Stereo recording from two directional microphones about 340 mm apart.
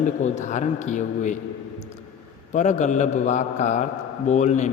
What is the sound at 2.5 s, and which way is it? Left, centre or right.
A man's voice, left.